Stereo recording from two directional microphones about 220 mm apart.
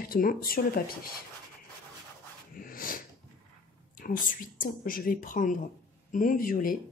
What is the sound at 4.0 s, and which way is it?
Speech, 40° left (ahead or behind).